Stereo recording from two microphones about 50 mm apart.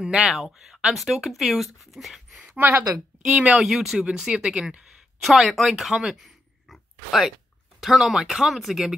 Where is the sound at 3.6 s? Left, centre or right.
Centre.